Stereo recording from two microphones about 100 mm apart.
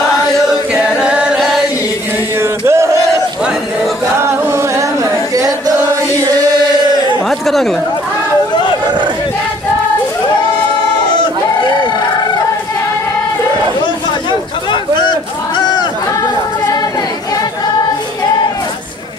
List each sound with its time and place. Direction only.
0.7 s chant: 10° right (ahead or behind)
2.4 s chant: 25° right (ahead or behind)
4.2 s singing: 25° right (ahead or behind)
7.2 s chatter: centre (ahead or behind)
14.7 s a sound: 50° left (ahead or behind)